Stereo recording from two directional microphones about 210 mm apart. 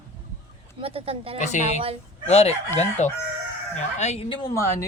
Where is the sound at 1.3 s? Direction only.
35° left (ahead or behind).